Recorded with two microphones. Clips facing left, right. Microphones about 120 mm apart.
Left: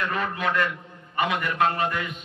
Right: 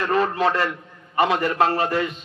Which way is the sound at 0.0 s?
35° right (ahead or behind).